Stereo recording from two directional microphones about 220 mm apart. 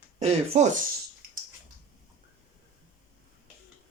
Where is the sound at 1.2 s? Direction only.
40° right (ahead or behind).